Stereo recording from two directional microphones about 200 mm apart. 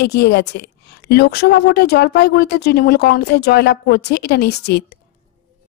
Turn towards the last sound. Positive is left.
turn(degrees=55)  # may be behind; listen again after turning